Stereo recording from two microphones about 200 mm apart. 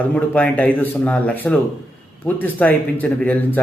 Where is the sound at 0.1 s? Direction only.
5° left (ahead or behind).